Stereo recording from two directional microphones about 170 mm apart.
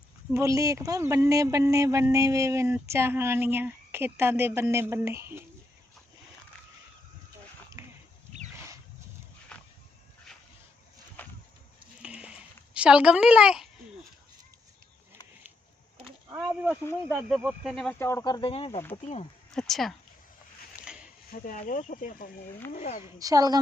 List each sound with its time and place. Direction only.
0.3 s a man's voice: 20° right (ahead or behind)
9.5 s a sound: 5° left (ahead or behind)
11.2 s a sound: 10° left (ahead or behind)
12.0 s a sound: 5° right (ahead or behind)
12.7 s a woman's voice: 5° right (ahead or behind)
17.1 s a man's voice: 10° right (ahead or behind)
17.4 s a woman's voice: centre (ahead or behind)
18.0 s speech: 15° left (ahead or behind); by 19.3 s 40° left (ahead or behind)
19.5 s a woman's voice: centre (ahead or behind)
21.2 s speech: 55° left (ahead or behind)
23.1 s a woman's voice: 20° right (ahead or behind)